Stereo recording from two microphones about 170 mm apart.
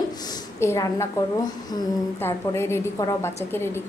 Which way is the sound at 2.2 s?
15° left (ahead or behind).